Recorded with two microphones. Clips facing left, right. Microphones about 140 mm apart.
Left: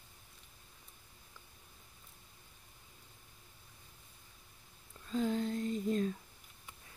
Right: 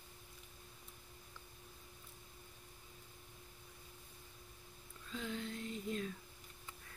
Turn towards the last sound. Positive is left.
turn(degrees=40)  # may be behind; listen again after turning